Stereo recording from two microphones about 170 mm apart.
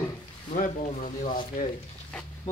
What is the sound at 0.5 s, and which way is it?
Speech, 50° left (ahead or behind).